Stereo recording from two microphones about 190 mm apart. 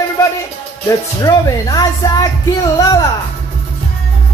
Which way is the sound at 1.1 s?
20° left (ahead or behind).